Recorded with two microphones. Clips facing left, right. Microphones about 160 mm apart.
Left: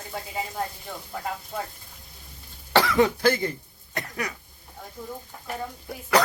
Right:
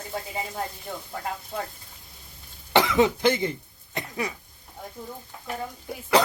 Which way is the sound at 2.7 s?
20° right (ahead or behind).